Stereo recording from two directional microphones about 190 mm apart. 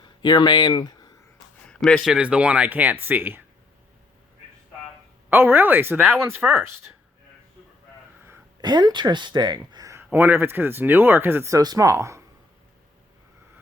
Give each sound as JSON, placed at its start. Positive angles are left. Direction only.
{"t": 0.2, "sound": "speech", "side_deg": 20}
{"t": 1.6, "sound": "speech", "side_deg": 5}
{"t": 5.3, "sound": "speech", "side_deg": -10}
{"t": 8.3, "sound": "speech", "side_deg": -20}